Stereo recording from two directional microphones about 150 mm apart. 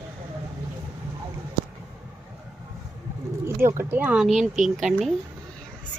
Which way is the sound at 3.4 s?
15° right (ahead or behind).